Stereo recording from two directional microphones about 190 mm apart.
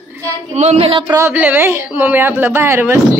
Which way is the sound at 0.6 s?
35° right (ahead or behind).